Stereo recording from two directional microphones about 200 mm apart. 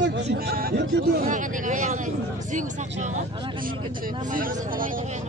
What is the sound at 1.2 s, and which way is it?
Speech, 40° right (ahead or behind).